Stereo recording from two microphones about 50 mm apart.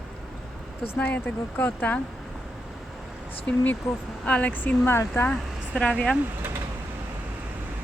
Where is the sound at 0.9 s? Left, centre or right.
Left.